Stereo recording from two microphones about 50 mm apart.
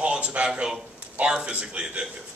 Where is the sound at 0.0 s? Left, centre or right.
Right.